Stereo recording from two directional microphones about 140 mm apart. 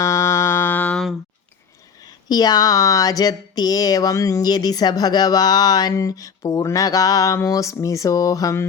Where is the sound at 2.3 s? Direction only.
30° left (ahead or behind).